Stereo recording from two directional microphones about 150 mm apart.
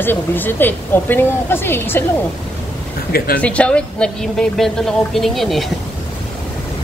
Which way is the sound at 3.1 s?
85° left.